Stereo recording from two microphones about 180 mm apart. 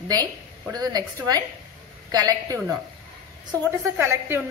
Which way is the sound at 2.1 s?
20° right (ahead or behind).